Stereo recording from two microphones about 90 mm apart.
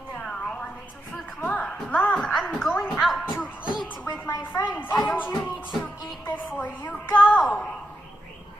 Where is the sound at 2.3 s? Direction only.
5° right (ahead or behind).